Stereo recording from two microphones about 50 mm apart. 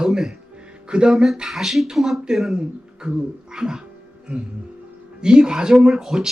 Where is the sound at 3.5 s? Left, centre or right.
Centre.